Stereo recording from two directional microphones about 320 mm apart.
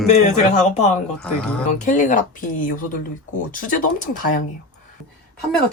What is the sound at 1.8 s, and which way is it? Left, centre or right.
Speech, left.